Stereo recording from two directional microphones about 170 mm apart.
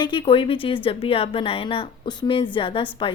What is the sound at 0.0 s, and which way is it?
A woman's voice, 30° left (ahead or behind).